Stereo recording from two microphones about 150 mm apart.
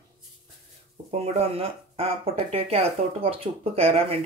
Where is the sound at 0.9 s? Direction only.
40° right (ahead or behind).